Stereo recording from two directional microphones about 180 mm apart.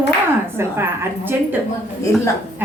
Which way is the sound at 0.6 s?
15° right (ahead or behind).